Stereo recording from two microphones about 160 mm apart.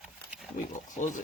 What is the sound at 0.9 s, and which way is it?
Speech, 50° left (ahead or behind).